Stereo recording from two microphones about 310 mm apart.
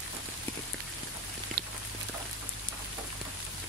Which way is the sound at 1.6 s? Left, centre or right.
Right.